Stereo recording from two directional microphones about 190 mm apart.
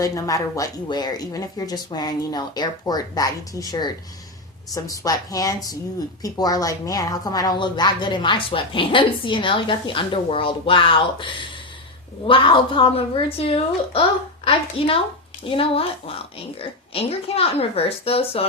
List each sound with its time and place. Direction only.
0.0 s a woman's voice: 15° left (ahead or behind)